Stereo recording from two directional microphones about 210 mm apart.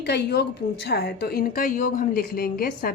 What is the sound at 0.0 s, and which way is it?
Speech, 50° left (ahead or behind).